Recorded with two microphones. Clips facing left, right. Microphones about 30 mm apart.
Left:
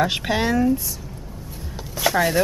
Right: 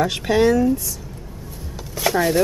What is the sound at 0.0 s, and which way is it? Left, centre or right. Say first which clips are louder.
Speech: right 4 dB; centre.